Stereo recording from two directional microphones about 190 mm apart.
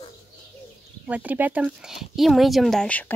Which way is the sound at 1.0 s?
10° right (ahead or behind).